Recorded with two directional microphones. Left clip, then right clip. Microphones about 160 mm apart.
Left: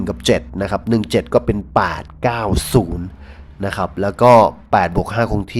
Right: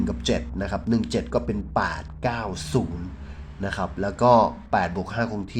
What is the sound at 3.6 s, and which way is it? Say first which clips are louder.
Speech: left 8 dB; 30° left (ahead or behind).